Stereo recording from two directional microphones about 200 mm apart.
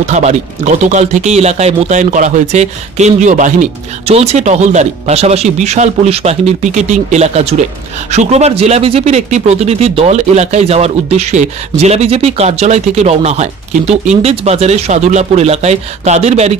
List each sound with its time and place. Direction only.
0.0 s speech: 35° right (ahead or behind)